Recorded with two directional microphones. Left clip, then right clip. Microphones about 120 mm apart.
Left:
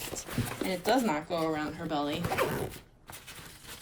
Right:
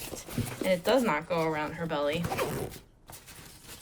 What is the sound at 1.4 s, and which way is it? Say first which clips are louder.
Speech: right 1 dB; 30° left (ahead or behind).